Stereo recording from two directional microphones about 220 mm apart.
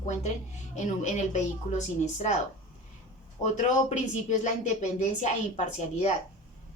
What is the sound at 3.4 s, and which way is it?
Speech, 35° left (ahead or behind).